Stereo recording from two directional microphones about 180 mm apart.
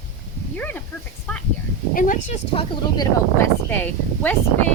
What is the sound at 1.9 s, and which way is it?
Speech, 45° left (ahead or behind).